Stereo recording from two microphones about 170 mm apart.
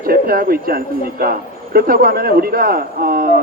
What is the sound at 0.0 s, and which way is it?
Speech, 60° right (ahead or behind).